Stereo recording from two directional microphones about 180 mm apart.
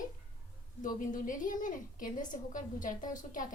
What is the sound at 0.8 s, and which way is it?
A woman's voice, 50° left (ahead or behind).